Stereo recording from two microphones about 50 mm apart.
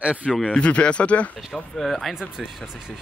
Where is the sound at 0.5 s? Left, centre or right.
Left.